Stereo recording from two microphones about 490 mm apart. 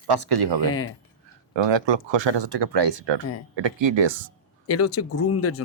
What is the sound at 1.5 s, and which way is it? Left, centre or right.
Speech, right.